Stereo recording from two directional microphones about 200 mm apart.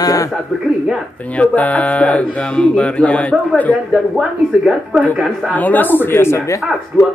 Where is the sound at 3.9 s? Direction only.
5° right (ahead or behind).